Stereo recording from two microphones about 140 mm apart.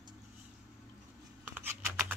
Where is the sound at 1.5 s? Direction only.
15° right (ahead or behind).